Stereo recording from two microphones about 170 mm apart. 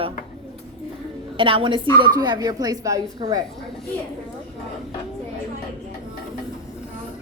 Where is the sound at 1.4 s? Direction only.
30° right (ahead or behind).